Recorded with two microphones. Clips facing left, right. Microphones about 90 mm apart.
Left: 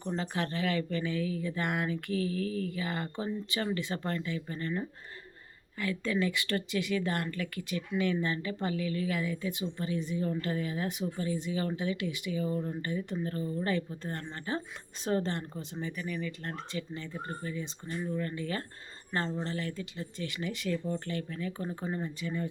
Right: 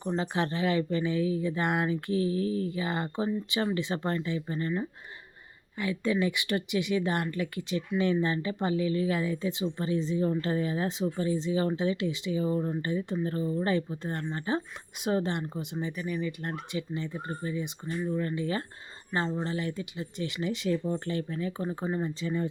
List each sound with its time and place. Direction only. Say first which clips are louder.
0.2 s speech: right 4 dB; 25° right (ahead or behind)